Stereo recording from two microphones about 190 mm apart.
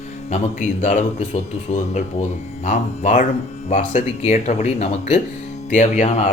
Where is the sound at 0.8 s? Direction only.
40° left (ahead or behind).